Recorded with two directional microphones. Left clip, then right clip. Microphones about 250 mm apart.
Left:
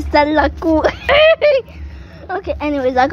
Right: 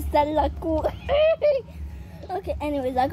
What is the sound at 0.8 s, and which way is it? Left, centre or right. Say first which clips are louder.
Speech: left 10 dB; left.